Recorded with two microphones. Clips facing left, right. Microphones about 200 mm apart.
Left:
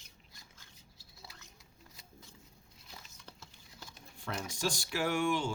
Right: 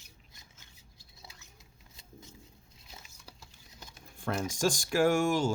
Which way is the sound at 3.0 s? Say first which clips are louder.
Even; 10° right (ahead or behind).